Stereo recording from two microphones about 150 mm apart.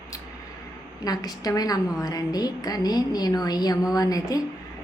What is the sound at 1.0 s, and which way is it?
A woman's voice, 25° left (ahead or behind).